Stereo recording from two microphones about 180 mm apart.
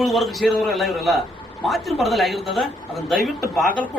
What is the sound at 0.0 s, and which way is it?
Speech, centre (ahead or behind).